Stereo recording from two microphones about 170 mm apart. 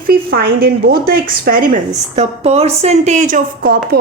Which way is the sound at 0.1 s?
60° right (ahead or behind).